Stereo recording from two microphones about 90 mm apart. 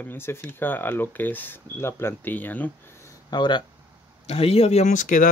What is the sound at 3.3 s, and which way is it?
Speech, 55° left (ahead or behind).